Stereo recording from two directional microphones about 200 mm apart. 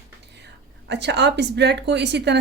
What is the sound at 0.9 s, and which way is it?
Speech, 60° right (ahead or behind).